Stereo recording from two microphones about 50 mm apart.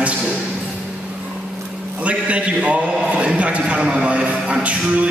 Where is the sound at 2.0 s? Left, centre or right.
Right.